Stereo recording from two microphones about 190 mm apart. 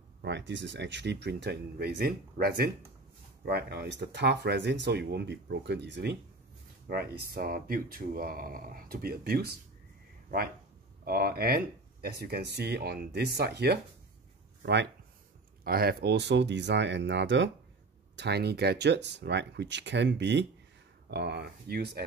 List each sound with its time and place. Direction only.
0.2 s speech: 70° right (ahead or behind); by 9.6 s 55° right (ahead or behind)
11.1 s speech: 55° right (ahead or behind)
15.6 s speech: 50° right (ahead or behind)